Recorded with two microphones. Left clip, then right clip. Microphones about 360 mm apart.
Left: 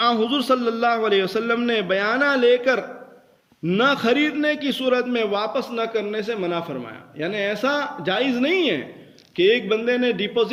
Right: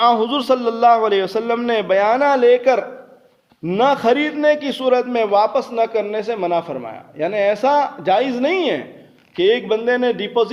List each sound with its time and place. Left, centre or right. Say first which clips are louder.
0.0 s a man's voice: right 5 dB; centre